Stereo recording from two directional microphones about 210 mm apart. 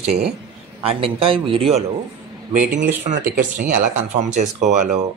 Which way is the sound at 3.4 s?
35° right (ahead or behind).